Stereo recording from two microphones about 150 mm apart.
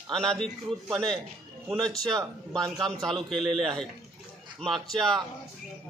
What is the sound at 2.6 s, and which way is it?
Speech, 25° right (ahead or behind).